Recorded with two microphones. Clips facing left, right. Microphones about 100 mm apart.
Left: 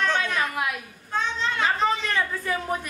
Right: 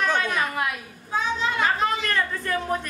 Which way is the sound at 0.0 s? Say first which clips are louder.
Right 1 dB; 5° right (ahead or behind).